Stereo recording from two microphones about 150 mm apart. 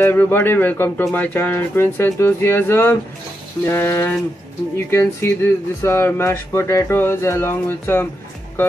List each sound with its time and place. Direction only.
0.0 s speech: 15° left (ahead or behind)